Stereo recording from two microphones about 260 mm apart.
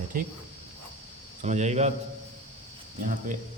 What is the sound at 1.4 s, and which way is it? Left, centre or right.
Speech, right.